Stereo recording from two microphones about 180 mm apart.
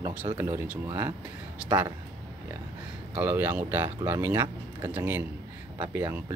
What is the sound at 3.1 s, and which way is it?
Speech, 10° right (ahead or behind).